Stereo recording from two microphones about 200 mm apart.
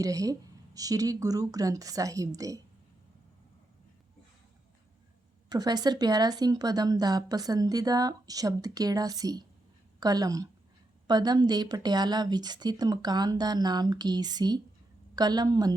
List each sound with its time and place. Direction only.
0.0 s speech: 15° right (ahead or behind)
5.5 s speech: 20° right (ahead or behind)